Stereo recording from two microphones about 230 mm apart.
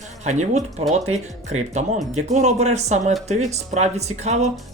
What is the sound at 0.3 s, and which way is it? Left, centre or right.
Speech, right.